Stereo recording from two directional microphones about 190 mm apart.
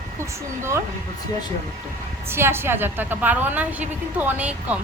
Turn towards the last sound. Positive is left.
turn(degrees=-5)  # may be behind; listen again after turning